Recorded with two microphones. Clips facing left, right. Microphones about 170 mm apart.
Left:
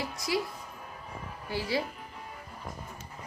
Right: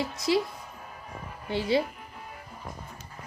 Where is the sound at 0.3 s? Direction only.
25° right (ahead or behind).